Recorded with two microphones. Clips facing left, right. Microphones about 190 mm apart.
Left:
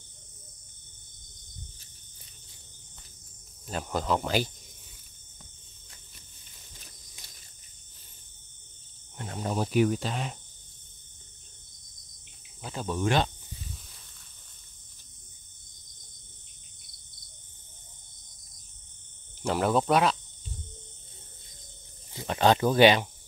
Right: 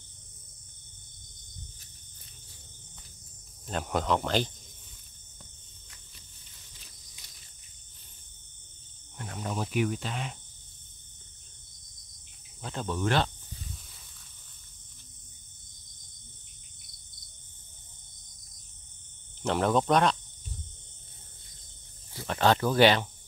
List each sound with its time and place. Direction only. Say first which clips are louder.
3.6 s speech: right 1 dB; centre (ahead or behind)
7.2 s cricket: left 4 dB; 50° left (ahead or behind)
9.2 s cricket: left 4 dB; 30° left (ahead or behind)
12.6 s cricket: left 1 dB; 10° left (ahead or behind)
19.4 s speech: even; 5° left (ahead or behind)
22.1 s speech: left 2 dB; 20° left (ahead or behind)